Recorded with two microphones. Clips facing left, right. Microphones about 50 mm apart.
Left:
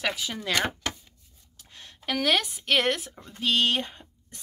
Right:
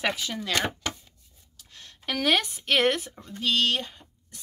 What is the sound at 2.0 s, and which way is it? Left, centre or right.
A woman's voice, centre.